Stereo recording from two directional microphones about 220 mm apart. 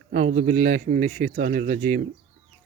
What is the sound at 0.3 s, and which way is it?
Speech, 35° right (ahead or behind).